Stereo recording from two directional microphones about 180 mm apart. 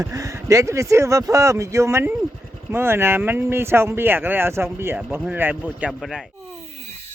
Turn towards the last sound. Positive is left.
turn(degrees=-5)  # may be behind; listen again after turning